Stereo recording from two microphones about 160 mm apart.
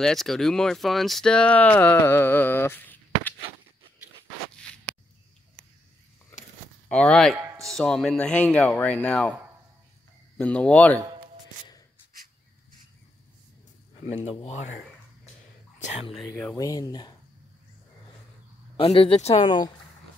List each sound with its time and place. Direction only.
0.0 s speech: centre (ahead or behind)
6.9 s speech: 5° left (ahead or behind)
7.3 s music: 15° right (ahead or behind)
7.6 s speech: 5° left (ahead or behind)
10.3 s speech: 5° left (ahead or behind)
14.0 s speech: 40° left (ahead or behind)
15.8 s speech: 40° left (ahead or behind)
16.5 s speech: 20° left (ahead or behind)
18.8 s speech: 35° left (ahead or behind)
19.4 s speech: 25° left (ahead or behind)